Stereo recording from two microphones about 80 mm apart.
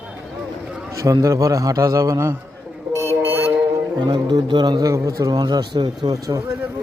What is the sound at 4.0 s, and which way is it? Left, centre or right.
Speech, right.